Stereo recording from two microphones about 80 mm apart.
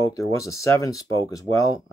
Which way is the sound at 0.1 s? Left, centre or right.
Left.